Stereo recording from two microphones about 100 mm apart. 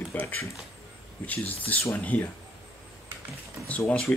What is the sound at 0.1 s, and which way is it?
Speech, 15° left (ahead or behind).